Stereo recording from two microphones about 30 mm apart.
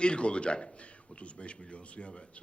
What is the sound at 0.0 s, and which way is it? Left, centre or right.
A man's voice, left.